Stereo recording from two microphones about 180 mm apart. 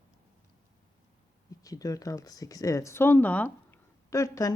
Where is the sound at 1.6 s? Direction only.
20° left (ahead or behind).